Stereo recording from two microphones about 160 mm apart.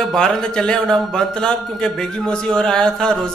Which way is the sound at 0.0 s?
5° left (ahead or behind).